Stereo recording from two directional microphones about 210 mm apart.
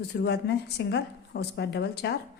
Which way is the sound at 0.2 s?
55° left (ahead or behind).